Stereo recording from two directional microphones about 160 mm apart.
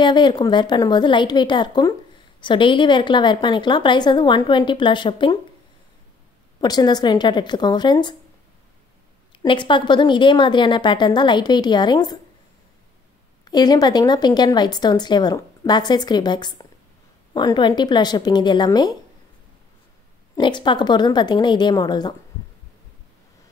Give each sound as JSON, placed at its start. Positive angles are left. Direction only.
{"t": 0.0, "sound": "speech", "side_deg": 30}
{"t": 6.6, "sound": "speech", "side_deg": 25}
{"t": 9.3, "sound": "speech", "side_deg": 30}
{"t": 13.5, "sound": "speech", "side_deg": 25}
{"t": 20.3, "sound": "speech", "side_deg": 30}